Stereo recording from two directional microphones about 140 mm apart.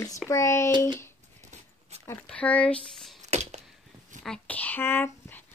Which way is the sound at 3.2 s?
55° right (ahead or behind).